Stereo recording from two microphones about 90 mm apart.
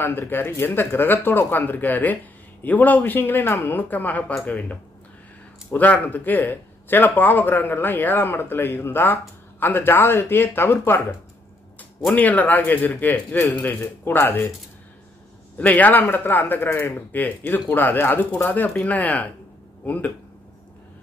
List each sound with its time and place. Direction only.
0.0 s speech: 25° left (ahead or behind)
12.2 s speech: 20° left (ahead or behind)
15.5 s speech: 20° left (ahead or behind)